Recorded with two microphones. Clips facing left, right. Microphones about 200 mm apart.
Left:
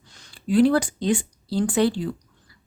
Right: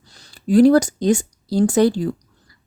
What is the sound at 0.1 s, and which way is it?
Speech, 40° right (ahead or behind).